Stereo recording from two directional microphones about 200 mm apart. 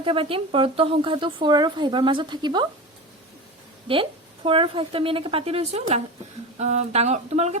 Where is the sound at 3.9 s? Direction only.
25° right (ahead or behind).